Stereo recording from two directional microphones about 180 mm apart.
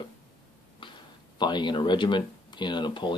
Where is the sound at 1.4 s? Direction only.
25° left (ahead or behind).